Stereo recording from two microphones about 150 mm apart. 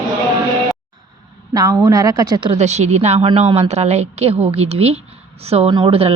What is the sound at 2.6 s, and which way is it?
A woman's voice, 50° right (ahead or behind).